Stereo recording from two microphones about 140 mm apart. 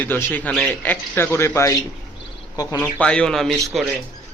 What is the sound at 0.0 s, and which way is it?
Speech, 15° left (ahead or behind).